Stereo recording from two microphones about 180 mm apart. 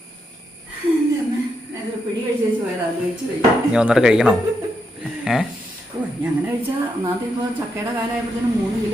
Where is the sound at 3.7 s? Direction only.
5° right (ahead or behind).